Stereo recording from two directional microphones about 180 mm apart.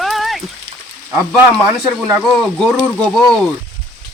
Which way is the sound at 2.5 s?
5° left (ahead or behind).